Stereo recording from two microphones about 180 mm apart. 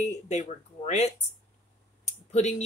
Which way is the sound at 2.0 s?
40° left (ahead or behind).